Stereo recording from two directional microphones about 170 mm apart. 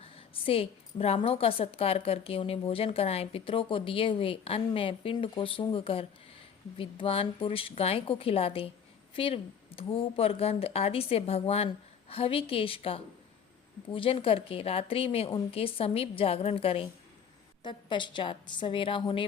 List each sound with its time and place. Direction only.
0.0 s a woman's voice: 35° left (ahead or behind)